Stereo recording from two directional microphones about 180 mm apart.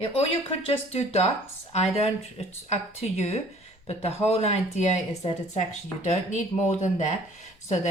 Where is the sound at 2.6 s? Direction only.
35° left (ahead or behind).